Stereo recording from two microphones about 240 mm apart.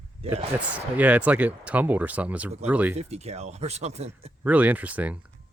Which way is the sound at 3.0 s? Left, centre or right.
Right.